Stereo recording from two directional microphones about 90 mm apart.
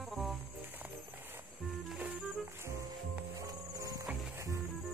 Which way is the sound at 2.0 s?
15° right (ahead or behind).